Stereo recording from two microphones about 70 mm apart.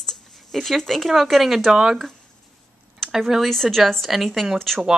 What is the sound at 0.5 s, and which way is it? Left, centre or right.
A woman's voice, centre.